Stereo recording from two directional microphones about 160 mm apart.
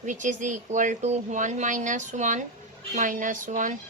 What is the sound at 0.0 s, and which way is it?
A woman's voice, 50° right (ahead or behind).